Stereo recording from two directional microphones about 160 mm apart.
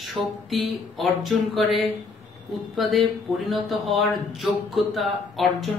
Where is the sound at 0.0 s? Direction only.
Centre (ahead or behind).